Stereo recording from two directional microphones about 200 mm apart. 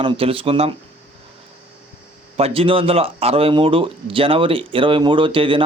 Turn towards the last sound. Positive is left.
turn(degrees=-25)  # may be behind; listen again after turning